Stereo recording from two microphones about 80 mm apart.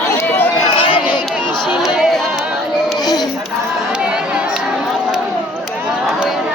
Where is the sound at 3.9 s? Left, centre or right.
Centre.